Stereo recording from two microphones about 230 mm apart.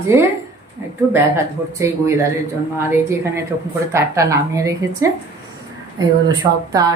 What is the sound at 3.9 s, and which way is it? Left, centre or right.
Speech, centre.